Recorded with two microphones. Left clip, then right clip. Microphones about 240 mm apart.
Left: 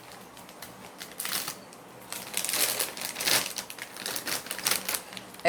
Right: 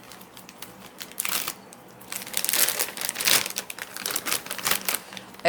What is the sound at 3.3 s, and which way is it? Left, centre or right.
Crumpling, right.